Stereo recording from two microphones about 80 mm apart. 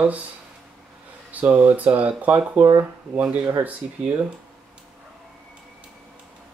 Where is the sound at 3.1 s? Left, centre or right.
Centre.